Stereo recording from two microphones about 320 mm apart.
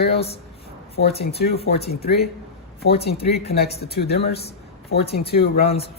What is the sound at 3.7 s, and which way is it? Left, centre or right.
Speech, left.